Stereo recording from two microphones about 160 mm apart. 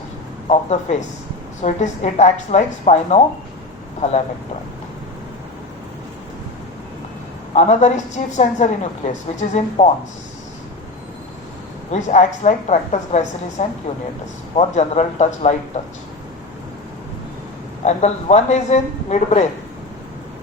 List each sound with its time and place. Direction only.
0.4 s a woman's voice: 45° left (ahead or behind)
7.5 s a woman's voice: 45° left (ahead or behind)
11.9 s a woman's voice: 50° left (ahead or behind)
17.8 s a woman's voice: 45° left (ahead or behind)